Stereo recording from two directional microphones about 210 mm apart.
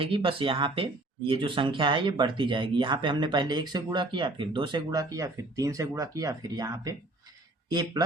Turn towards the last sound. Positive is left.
turn(degrees=-20)  # may be behind; listen again after turning